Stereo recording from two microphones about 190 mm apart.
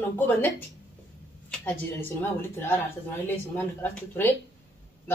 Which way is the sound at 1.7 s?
10° left (ahead or behind).